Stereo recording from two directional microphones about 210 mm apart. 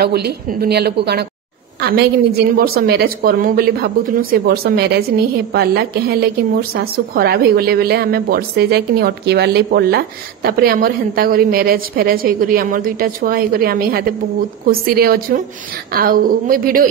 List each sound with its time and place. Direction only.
0.0 s a woman's voice: 50° right (ahead or behind)